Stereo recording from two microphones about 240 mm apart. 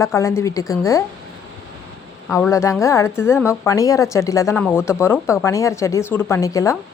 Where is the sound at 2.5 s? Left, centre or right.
Centre.